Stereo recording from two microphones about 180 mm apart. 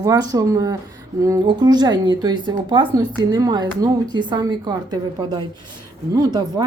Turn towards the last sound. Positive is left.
turn(degrees=-20)  # may be behind; listen again after turning